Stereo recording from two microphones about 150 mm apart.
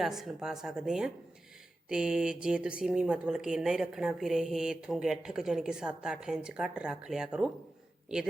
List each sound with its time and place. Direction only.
0.0 s speech: centre (ahead or behind)